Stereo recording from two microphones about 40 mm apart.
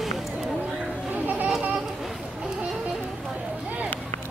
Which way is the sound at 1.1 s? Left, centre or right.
Right.